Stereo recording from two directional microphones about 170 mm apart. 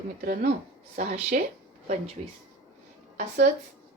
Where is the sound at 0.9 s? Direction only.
45° right (ahead or behind).